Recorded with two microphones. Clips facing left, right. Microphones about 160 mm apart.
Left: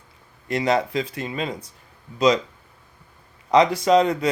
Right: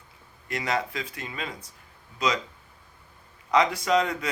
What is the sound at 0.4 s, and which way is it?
Speech, 30° left (ahead or behind).